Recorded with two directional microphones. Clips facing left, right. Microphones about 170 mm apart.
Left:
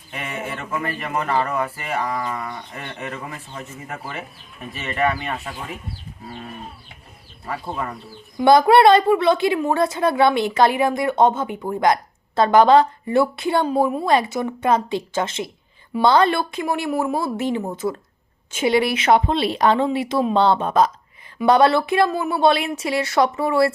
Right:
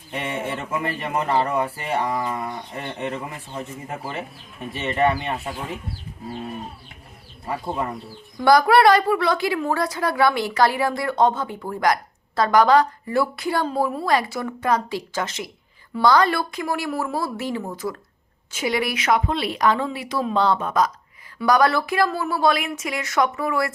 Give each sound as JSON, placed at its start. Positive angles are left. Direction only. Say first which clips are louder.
{"t": 0.1, "sound": "a sound", "louder": "right 2 dB", "side_deg": -30}
{"t": 0.7, "sound": "speech", "louder": "left 1 dB", "side_deg": -25}
{"t": 8.4, "sound": "a woman's voice", "louder": "left 3 dB", "side_deg": 25}